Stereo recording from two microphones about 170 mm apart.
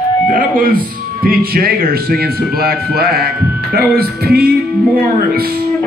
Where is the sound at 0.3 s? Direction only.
55° right (ahead or behind).